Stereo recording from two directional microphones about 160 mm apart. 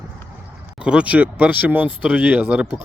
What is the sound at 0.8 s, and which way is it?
Speech, 5° right (ahead or behind).